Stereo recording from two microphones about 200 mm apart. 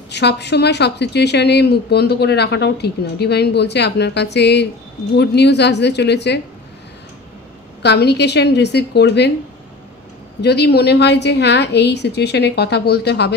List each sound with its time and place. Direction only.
0.1 s a woman's voice: 55° left (ahead or behind)
7.8 s a woman's voice: 55° left (ahead or behind)
10.4 s a woman's voice: 55° left (ahead or behind)